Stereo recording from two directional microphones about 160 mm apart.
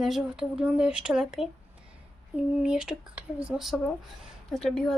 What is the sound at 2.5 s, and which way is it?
Speech, 5° right (ahead or behind).